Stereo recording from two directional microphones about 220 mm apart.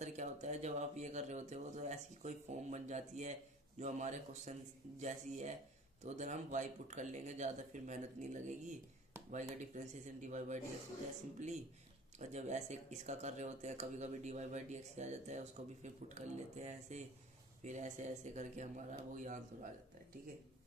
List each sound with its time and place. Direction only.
0.0 s speech: 30° right (ahead or behind)